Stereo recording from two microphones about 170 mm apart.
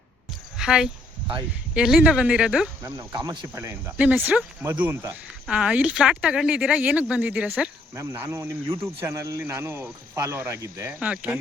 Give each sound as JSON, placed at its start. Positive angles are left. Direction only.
{"t": 0.5, "sound": "a sound", "side_deg": -5}
{"t": 1.7, "sound": "speech", "side_deg": -5}
{"t": 2.8, "sound": "speech", "side_deg": -20}
{"t": 11.0, "sound": "speech", "side_deg": -5}